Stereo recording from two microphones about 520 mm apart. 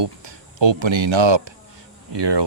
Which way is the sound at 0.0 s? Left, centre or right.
Right.